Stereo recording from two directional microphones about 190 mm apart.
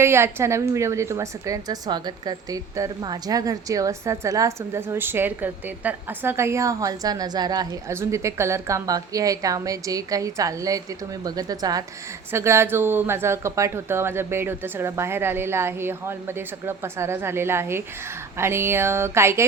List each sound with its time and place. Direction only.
0.0 s a woman's voice: 15° right (ahead or behind)